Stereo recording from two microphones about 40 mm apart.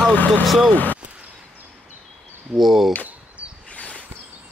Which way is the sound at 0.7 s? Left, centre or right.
Left.